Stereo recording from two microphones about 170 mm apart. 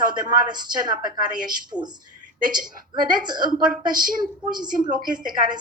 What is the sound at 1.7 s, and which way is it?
Speech, 25° right (ahead or behind).